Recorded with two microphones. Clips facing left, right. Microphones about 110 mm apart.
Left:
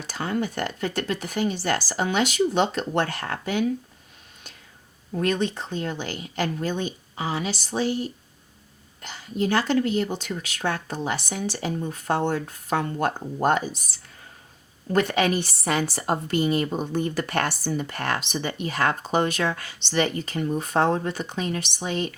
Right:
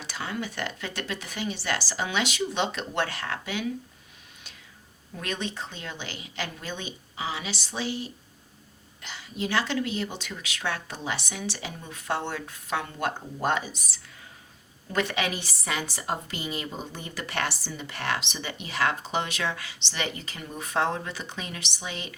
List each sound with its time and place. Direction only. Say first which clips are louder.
0.1 s a woman's voice: left 7 dB; 45° left (ahead or behind)
5.1 s a woman's voice: left 9 dB; 45° left (ahead or behind)